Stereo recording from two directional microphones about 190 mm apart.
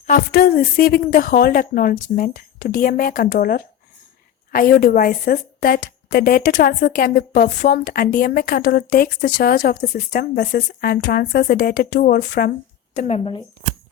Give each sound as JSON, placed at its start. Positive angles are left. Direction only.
{"t": 0.1, "sound": "a woman's voice", "side_deg": 55}
{"t": 12.9, "sound": "speech", "side_deg": 35}